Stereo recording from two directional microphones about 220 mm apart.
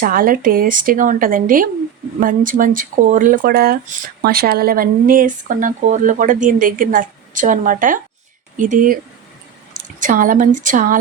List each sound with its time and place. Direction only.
0.0 s speech: 40° right (ahead or behind)
10.0 s speech: 35° right (ahead or behind)